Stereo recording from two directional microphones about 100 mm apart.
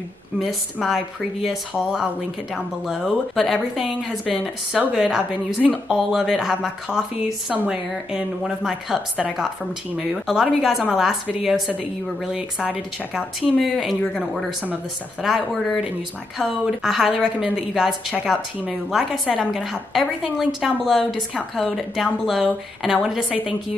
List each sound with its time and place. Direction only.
0.4 s a woman's voice: centre (ahead or behind)
4.7 s a woman's voice: 10° right (ahead or behind)